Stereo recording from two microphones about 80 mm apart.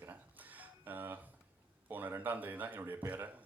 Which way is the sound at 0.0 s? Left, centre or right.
Right.